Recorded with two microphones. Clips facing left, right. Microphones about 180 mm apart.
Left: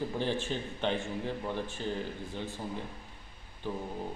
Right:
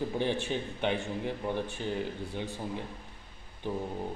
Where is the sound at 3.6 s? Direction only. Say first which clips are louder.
Right 2 dB; 20° right (ahead or behind).